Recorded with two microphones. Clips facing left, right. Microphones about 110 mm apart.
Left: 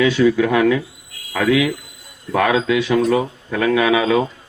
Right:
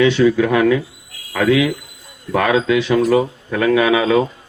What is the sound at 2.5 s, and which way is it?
Speech, 40° right (ahead or behind).